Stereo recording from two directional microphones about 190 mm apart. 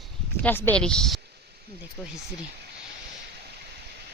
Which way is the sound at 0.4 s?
10° left (ahead or behind).